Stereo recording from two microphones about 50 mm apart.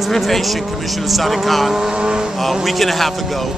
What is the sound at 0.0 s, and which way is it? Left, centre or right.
Speech, centre.